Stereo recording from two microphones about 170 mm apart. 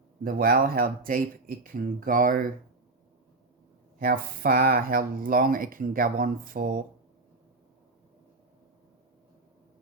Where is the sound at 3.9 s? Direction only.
60° right (ahead or behind).